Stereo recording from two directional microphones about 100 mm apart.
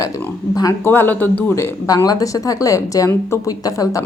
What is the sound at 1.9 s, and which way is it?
A woman's voice, 40° left (ahead or behind).